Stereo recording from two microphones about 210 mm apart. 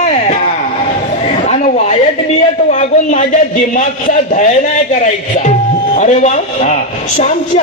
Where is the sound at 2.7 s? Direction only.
35° left (ahead or behind).